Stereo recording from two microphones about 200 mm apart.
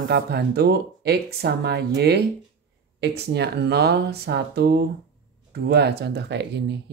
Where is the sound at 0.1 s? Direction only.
55° right (ahead or behind).